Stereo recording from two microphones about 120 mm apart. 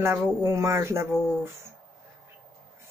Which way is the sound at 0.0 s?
25° right (ahead or behind).